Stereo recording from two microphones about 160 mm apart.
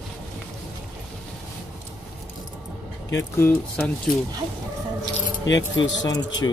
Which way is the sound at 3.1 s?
15° left (ahead or behind).